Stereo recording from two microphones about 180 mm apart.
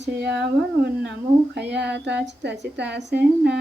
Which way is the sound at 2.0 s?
70° right (ahead or behind).